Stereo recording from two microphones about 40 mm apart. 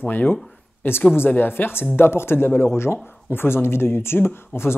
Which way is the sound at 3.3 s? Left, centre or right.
Left.